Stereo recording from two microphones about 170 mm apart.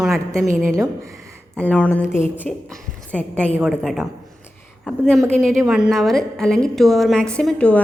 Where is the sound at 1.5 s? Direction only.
10° left (ahead or behind).